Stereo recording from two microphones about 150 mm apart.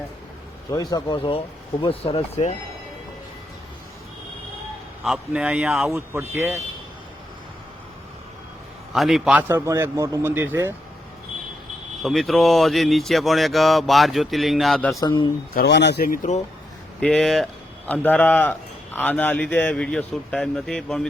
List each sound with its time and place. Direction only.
0.7 s speech: 25° left (ahead or behind); by 2.6 s 45° left (ahead or behind)
5.0 s speech: 5° right (ahead or behind)
5.9 s a man's voice: 15° right (ahead or behind)
8.9 s a man's voice: centre (ahead or behind)
12.0 s speech: centre (ahead or behind)
15.0 s speech: 30° left (ahead or behind)
15.5 s speech: 90° left; by 16.3 s 70° left (ahead or behind)
17.0 s speech: 5° left (ahead or behind)